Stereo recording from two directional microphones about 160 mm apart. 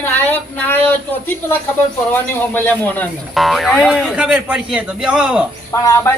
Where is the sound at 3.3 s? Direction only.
Centre (ahead or behind).